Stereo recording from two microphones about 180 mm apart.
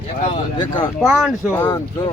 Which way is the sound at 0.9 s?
Centre (ahead or behind).